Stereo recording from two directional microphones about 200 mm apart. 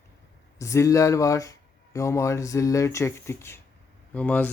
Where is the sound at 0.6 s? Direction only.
15° left (ahead or behind).